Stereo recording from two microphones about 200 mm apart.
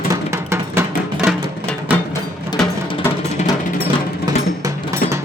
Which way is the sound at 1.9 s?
10° right (ahead or behind).